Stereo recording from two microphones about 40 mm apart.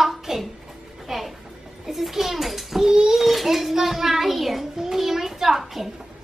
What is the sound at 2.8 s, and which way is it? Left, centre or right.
A child's voice, centre.